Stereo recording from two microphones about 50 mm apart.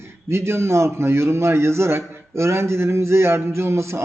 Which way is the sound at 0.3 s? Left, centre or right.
Right.